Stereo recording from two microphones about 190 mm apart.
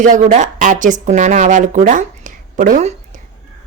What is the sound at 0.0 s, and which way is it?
A woman's voice, 40° right (ahead or behind).